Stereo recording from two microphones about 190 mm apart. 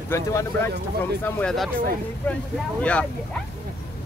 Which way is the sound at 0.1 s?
15° left (ahead or behind).